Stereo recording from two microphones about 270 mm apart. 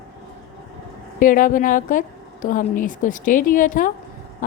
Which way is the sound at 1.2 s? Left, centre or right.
Left.